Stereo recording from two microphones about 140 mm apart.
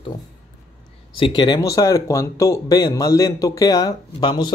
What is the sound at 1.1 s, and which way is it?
Speech, 35° left (ahead or behind).